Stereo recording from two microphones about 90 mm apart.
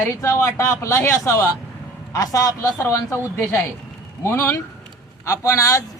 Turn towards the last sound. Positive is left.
turn(degrees=35)  # may be behind; listen again after turning